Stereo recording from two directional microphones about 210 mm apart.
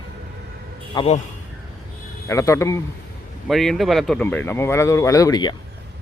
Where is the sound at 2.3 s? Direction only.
15° left (ahead or behind).